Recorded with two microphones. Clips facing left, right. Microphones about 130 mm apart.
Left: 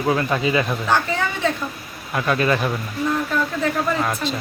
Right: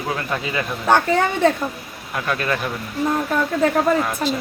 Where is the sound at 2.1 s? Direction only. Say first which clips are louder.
Left 3 dB; 5° left (ahead or behind).